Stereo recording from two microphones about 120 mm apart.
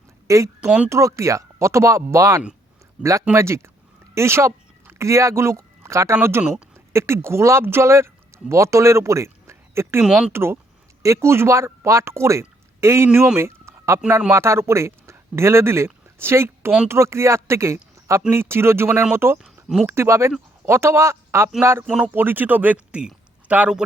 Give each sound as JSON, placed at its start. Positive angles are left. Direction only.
{"t": 0.3, "sound": "speech", "side_deg": -25}
{"t": 10.0, "sound": "speech", "side_deg": -5}
{"t": 10.3, "sound": "speech", "side_deg": -20}
{"t": 13.1, "sound": "speech", "side_deg": -10}
{"t": 19.6, "sound": "speech", "side_deg": -5}
{"t": 19.9, "sound": "speech", "side_deg": -25}